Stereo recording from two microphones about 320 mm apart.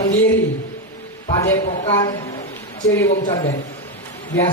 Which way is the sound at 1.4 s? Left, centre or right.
Centre.